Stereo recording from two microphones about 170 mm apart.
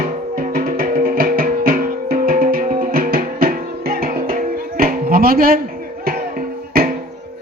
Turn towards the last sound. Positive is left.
turn(degrees=-60)  # may be behind; listen again after turning